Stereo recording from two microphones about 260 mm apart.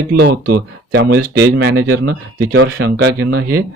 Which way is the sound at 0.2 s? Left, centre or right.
Right.